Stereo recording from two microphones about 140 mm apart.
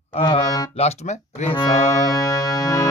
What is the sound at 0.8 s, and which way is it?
Speech, 50° left (ahead or behind).